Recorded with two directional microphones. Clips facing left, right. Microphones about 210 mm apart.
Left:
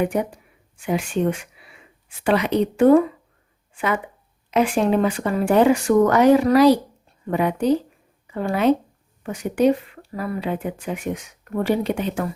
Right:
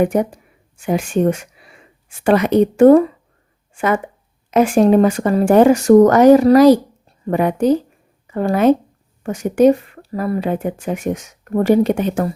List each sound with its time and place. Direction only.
0.0 s speech: 45° right (ahead or behind)